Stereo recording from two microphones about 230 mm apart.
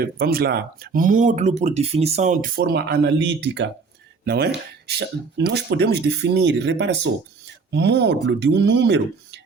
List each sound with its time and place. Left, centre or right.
0.0 s speech: right